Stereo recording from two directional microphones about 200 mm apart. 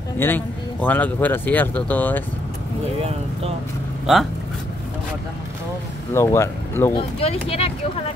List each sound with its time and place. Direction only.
0.2 s speech: 10° left (ahead or behind)
3.0 s speech: 30° right (ahead or behind)
4.0 s speech: centre (ahead or behind)
6.1 s speech: 15° left (ahead or behind)
7.0 s speech: 30° left (ahead or behind)